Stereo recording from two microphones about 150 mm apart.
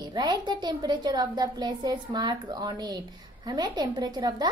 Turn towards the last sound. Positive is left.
turn(degrees=-25)  # may be behind; listen again after turning